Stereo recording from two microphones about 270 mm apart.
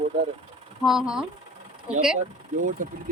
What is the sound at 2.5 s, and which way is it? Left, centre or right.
Speech, right.